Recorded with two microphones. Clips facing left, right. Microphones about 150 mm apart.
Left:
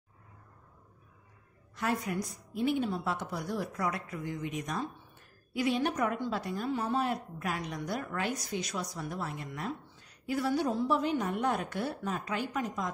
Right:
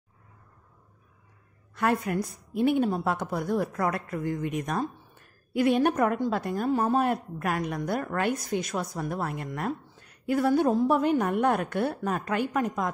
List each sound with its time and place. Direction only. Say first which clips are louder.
1.8 s a woman's voice: right 6 dB; 60° right (ahead or behind)